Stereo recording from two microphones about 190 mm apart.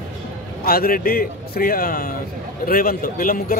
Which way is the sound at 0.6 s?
50° left (ahead or behind).